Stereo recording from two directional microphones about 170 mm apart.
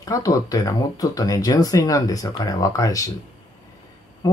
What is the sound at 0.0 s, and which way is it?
Speech, 20° left (ahead or behind).